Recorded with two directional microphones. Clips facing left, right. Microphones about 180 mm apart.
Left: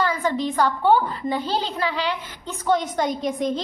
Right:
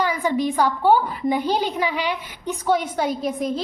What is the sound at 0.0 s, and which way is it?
A woman's voice, 15° right (ahead or behind).